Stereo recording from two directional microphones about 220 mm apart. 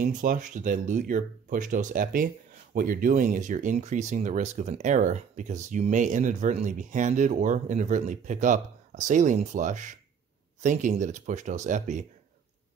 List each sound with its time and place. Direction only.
0.0 s speech: 35° right (ahead or behind)